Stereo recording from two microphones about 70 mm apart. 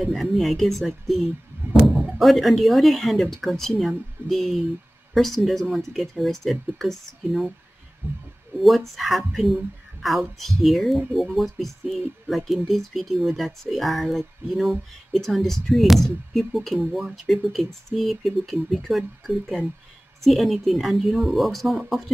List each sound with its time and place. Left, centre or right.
0.0 s speech: centre
8.0 s speech: right
8.5 s speech: centre